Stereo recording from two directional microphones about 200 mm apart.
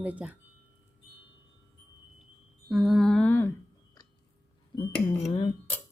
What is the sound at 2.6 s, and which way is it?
Lullaby, centre (ahead or behind).